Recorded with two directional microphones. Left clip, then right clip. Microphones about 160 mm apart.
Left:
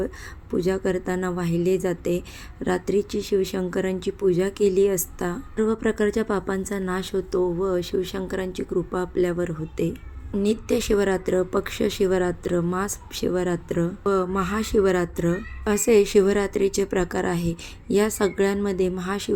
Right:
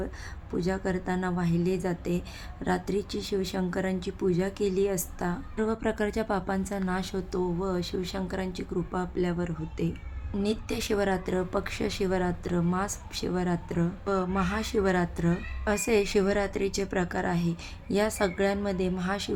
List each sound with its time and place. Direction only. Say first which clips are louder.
0.5 s speech: left 7 dB; 25° left (ahead or behind)